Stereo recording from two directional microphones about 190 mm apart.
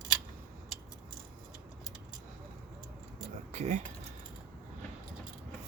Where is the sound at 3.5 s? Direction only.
35° right (ahead or behind).